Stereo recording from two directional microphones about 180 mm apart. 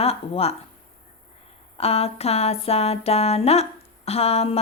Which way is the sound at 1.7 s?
35° left (ahead or behind).